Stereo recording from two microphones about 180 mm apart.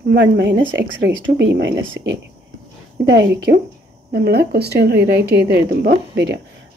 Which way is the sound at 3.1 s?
80° right.